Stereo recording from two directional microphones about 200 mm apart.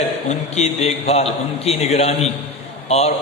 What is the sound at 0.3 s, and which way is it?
A man's voice, 35° left (ahead or behind).